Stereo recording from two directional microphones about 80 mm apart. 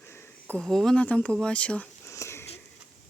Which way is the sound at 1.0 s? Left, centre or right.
Centre.